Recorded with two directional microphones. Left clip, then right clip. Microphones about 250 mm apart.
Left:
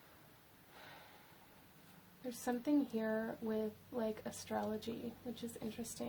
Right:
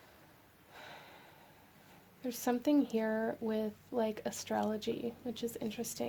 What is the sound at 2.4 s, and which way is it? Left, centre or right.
A woman's voice, right.